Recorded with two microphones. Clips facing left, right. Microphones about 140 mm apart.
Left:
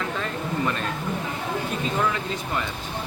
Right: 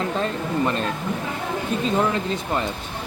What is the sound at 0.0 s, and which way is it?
Speech, 30° right (ahead or behind).